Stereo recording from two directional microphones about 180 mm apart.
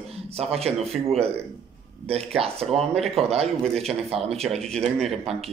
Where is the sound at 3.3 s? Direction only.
35° right (ahead or behind).